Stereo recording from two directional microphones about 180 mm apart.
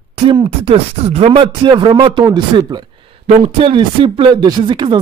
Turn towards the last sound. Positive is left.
turn(degrees=-25)  # may be behind; listen again after turning